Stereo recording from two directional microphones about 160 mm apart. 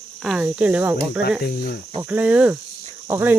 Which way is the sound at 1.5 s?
80° left.